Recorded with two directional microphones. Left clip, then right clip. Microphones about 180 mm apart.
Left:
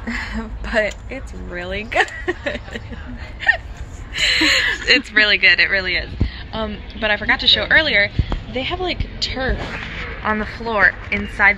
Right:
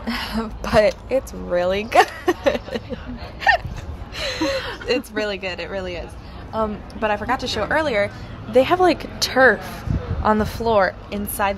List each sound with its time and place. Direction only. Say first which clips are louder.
0.4 s speech: right 4 dB; 35° right (ahead or behind)
3.3 s gasp: even; 40° right (ahead or behind)
4.2 s speech: left 8 dB; 10° right (ahead or behind)
8.6 s speech: right 6 dB; 55° right (ahead or behind)
10.7 s speech: left 2 dB; 35° right (ahead or behind)
11.4 s speech: left 8 dB; 15° right (ahead or behind)